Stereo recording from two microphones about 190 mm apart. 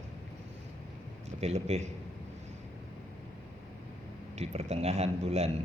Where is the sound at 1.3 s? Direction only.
35° right (ahead or behind).